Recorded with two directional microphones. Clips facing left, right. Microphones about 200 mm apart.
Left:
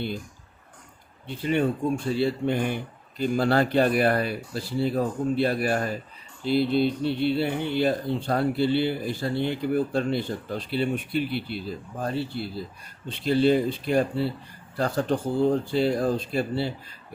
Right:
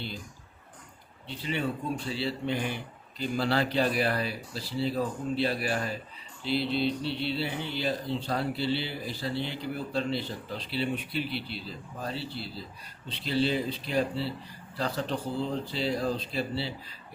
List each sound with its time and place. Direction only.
1.3 s speech: 50° left (ahead or behind)